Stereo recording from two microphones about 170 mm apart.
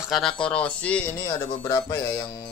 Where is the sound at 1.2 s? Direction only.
25° left (ahead or behind).